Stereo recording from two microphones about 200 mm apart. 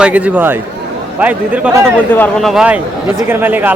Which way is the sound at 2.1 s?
5° left (ahead or behind).